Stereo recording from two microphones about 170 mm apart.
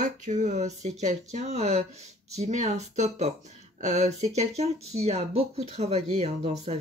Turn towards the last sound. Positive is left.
turn(degrees=-40)  # may be behind; listen again after turning